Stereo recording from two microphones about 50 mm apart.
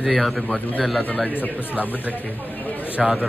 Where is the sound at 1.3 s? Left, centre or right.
Left.